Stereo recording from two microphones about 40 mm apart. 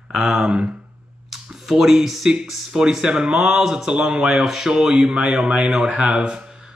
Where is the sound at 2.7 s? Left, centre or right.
Centre.